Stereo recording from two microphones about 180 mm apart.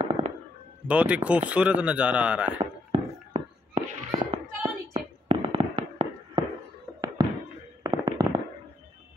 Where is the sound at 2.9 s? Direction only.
35° right (ahead or behind).